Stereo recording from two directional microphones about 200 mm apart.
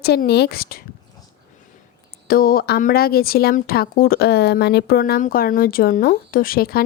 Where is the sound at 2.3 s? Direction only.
45° left (ahead or behind).